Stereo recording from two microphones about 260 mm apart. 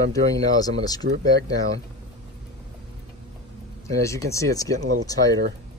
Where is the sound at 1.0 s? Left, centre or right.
Right.